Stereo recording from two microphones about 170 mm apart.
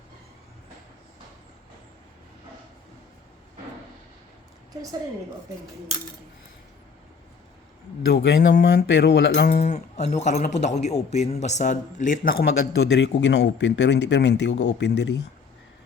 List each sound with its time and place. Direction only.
4.7 s a woman's voice: 20° right (ahead or behind)
8.1 s speech: 90° left
9.6 s speech: 40° left (ahead or behind)
13.0 s speech: 90° left